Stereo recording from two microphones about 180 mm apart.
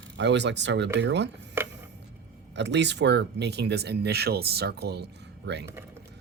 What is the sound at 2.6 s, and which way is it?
Speech, 75° right (ahead or behind).